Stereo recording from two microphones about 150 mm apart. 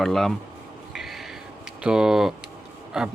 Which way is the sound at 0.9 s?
Centre (ahead or behind).